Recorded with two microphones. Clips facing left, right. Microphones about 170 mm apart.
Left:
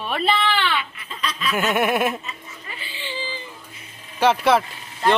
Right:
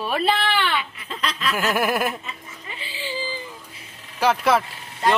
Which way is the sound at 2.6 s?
30° right (ahead or behind).